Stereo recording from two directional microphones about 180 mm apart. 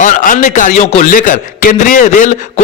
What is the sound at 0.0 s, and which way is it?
A man's voice, 50° left (ahead or behind).